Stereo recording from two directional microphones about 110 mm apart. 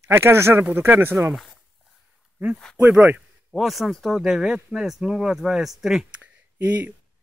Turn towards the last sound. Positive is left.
turn(degrees=-15)  # may be behind; listen again after turning